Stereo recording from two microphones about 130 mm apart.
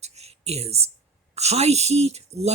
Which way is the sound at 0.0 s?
55° right (ahead or behind).